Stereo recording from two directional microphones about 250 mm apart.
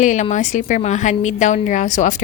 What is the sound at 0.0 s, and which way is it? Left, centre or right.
A woman's voice, left.